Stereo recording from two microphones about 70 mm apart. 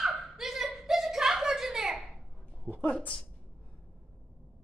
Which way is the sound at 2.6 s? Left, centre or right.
Centre.